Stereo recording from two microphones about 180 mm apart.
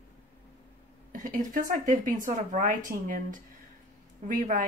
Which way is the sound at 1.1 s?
50° right (ahead or behind).